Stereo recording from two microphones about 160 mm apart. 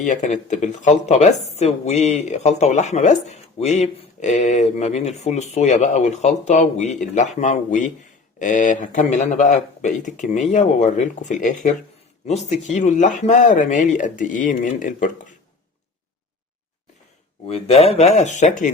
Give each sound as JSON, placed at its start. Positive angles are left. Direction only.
{"t": 0.0, "sound": "speech", "side_deg": 50}
{"t": 17.4, "sound": "speech", "side_deg": 40}